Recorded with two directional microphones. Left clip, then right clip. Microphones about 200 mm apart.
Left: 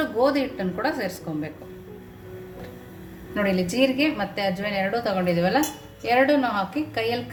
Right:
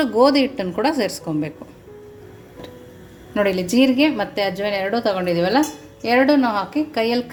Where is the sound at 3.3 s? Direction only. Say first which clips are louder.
Right 5 dB; 40° right (ahead or behind).